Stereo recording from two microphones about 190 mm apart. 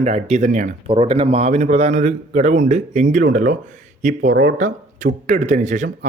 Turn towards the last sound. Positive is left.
turn(degrees=-40)  # may be behind; listen again after turning